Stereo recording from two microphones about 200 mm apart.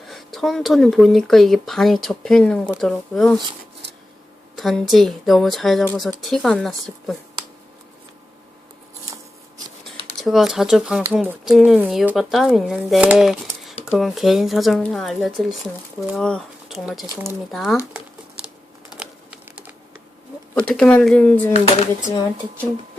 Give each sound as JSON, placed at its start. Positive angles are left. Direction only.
{"t": 0.1, "sound": "speech", "side_deg": 0}
{"t": 4.5, "sound": "speech", "side_deg": 0}
{"t": 10.2, "sound": "speech", "side_deg": 0}
{"t": 18.9, "sound": "typing", "side_deg": -5}
{"t": 20.6, "sound": "speech", "side_deg": 5}
{"t": 21.5, "sound": "speech", "side_deg": 30}